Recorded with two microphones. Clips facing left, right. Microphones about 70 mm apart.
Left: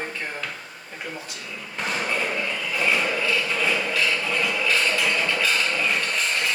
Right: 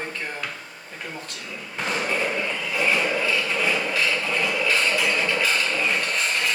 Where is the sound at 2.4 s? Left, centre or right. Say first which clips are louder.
Right 1 dB; centre.